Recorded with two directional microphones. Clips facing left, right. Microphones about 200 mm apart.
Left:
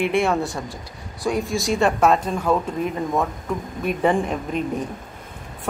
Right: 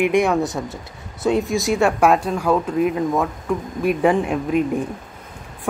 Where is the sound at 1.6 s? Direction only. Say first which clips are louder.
Left 1 dB; centre (ahead or behind).